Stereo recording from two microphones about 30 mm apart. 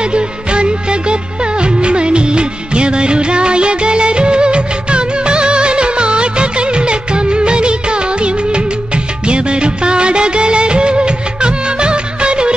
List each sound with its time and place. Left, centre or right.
0.0 s music: right